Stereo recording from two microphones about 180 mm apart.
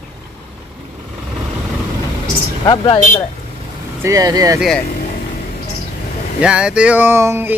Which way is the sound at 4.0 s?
20° right (ahead or behind).